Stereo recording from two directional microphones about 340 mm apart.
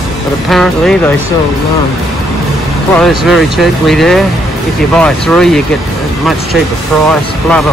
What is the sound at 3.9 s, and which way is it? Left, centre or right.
Speech, centre.